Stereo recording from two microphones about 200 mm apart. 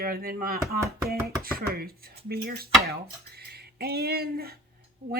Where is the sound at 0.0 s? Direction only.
45° right (ahead or behind).